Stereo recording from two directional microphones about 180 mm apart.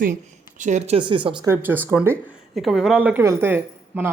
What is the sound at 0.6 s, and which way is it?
Speech, 40° right (ahead or behind).